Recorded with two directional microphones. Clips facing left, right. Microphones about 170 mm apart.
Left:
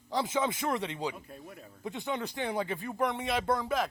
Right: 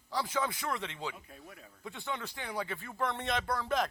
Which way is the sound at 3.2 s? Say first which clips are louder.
Left 4 dB; 5° left (ahead or behind).